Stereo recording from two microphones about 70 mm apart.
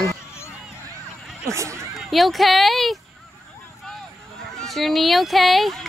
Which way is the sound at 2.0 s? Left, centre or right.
Centre.